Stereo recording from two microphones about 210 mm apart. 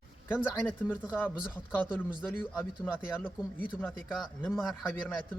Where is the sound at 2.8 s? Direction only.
10° left (ahead or behind).